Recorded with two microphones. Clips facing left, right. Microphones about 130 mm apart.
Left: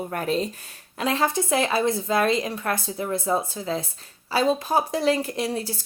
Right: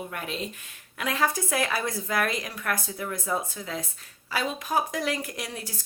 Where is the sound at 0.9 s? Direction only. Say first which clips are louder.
Left 4 dB; 30° left (ahead or behind).